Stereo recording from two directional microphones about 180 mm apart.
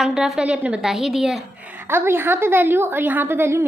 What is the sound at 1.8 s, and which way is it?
A woman's voice, 15° right (ahead or behind).